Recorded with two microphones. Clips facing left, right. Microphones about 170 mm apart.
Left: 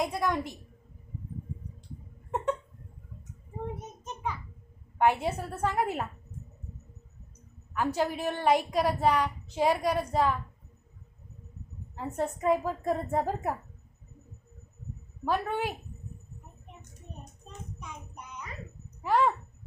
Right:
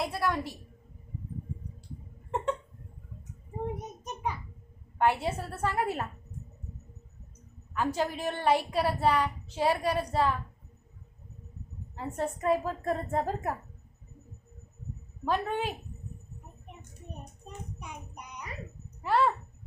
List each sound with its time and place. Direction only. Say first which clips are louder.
0.0 s a woman's voice: left 1 dB; 15° left (ahead or behind)
3.8 s a sound: right 2 dB; 15° right (ahead or behind)
4.9 s a woman's voice: left 1 dB; 15° left (ahead or behind)
7.7 s a woman's voice: left 1 dB; 10° left (ahead or behind)
11.9 s a woman's voice: left 1 dB; 15° left (ahead or behind)
15.2 s a woman's voice: even; 10° left (ahead or behind)
17.4 s a sound: even; 15° right (ahead or behind)
19.0 s a woman's voice: left 1 dB; 15° left (ahead or behind)